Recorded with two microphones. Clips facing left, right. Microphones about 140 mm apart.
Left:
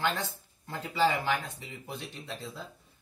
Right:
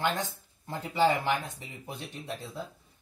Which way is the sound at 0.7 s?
20° right (ahead or behind).